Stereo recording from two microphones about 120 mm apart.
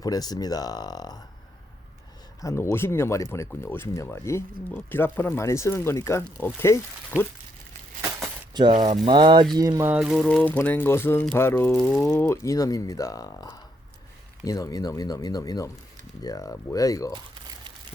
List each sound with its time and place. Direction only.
0.0 s speech: 30° left (ahead or behind)
2.4 s speech: 25° left (ahead or behind)
8.6 s speech: 35° right (ahead or behind)
9.9 s speech: 5° right (ahead or behind)
10.2 s speech: 10° left (ahead or behind); by 17.2 s 30° left (ahead or behind)